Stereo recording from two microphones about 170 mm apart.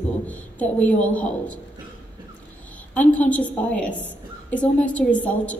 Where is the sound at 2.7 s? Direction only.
10° left (ahead or behind).